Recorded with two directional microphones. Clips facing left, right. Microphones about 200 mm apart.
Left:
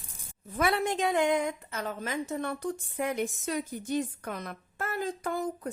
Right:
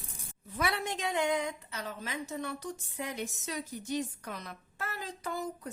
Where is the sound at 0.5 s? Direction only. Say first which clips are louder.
Left 6 dB; 50° left (ahead or behind).